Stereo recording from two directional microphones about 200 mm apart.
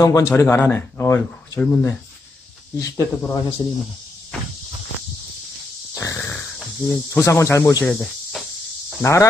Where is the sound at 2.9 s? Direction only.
15° left (ahead or behind).